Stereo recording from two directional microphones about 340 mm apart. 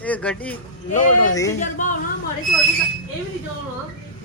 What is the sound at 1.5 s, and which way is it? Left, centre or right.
Speech, left.